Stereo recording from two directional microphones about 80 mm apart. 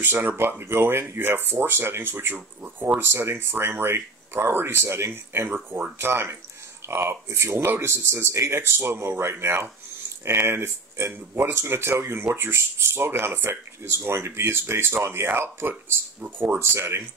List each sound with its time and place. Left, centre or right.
0.0 s speech: right